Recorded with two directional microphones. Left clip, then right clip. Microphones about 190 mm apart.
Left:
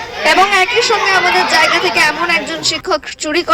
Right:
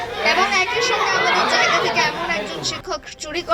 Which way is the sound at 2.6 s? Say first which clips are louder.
Left 10 dB; 50° left (ahead or behind).